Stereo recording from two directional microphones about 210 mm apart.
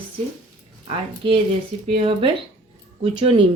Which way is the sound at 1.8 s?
25° right (ahead or behind).